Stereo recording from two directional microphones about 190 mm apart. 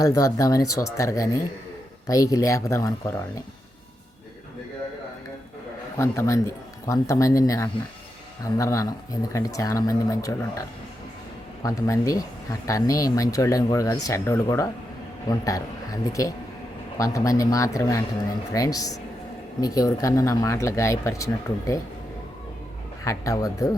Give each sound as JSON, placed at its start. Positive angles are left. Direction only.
{"t": 0.0, "sound": "speech", "side_deg": 20}
{"t": 6.0, "sound": "speech", "side_deg": 15}
{"t": 11.6, "sound": "speech", "side_deg": 15}
{"t": 23.0, "sound": "speech", "side_deg": 15}